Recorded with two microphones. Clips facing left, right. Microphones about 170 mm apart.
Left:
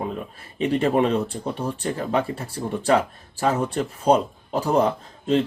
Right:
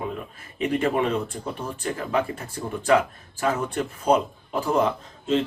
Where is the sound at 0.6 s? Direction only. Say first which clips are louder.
Left 3 dB; 30° left (ahead or behind).